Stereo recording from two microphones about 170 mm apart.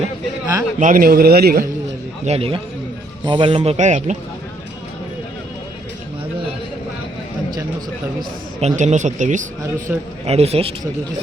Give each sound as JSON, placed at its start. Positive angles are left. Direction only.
{"t": 0.8, "sound": "a man's voice", "side_deg": -55}
{"t": 2.2, "sound": "speech", "side_deg": -35}
{"t": 8.6, "sound": "speech", "side_deg": -45}
{"t": 9.7, "sound": "a man's voice", "side_deg": -15}
{"t": 10.2, "sound": "speech", "side_deg": -35}